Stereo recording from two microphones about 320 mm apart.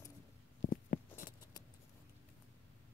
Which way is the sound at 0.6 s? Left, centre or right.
Left.